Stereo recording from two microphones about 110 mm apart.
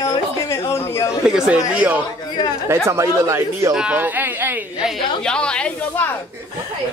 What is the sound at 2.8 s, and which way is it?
Speech, 25° right (ahead or behind).